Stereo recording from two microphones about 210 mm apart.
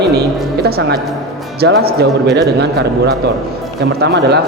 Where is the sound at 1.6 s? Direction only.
50° right (ahead or behind).